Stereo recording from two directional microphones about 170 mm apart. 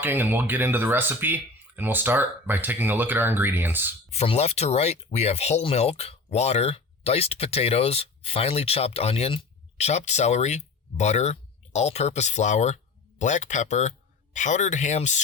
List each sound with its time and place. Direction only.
0.0 s speech: 10° right (ahead or behind)
4.1 s speech: 40° left (ahead or behind)